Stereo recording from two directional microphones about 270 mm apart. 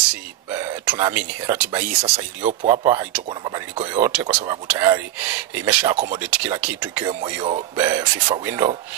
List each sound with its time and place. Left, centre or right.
0.6 s speech: centre
1.8 s speech: right
2.8 s speech: centre
6.1 s speech: centre